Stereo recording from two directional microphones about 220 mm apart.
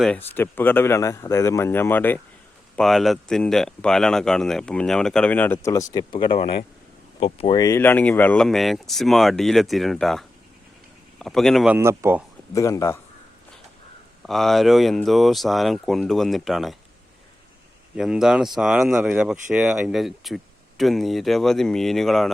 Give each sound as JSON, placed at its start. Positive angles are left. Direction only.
{"t": 0.0, "sound": "speech", "side_deg": 5}
{"t": 12.5, "sound": "speech", "side_deg": 15}
{"t": 14.2, "sound": "speech", "side_deg": 0}
{"t": 17.9, "sound": "speech", "side_deg": -5}